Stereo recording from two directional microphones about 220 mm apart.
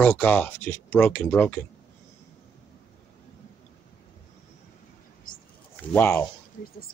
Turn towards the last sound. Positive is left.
turn(degrees=10)  # may be behind; listen again after turning